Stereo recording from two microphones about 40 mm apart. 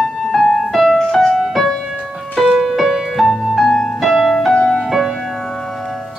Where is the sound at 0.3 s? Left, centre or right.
Centre.